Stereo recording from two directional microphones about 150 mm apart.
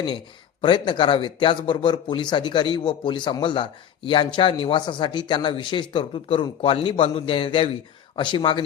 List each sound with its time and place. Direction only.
0.6 s speech: 35° left (ahead or behind)